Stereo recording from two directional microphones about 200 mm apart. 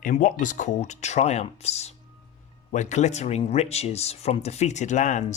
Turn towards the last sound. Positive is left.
turn(degrees=35)  # may be behind; listen again after turning